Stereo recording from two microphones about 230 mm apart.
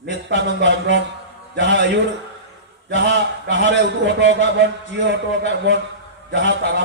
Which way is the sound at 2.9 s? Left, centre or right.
Right.